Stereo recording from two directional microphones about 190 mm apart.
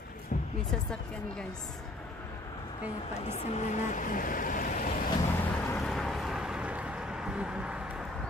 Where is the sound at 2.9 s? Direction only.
35° left (ahead or behind).